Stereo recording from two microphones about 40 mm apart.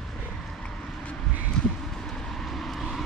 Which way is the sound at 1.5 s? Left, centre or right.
Centre.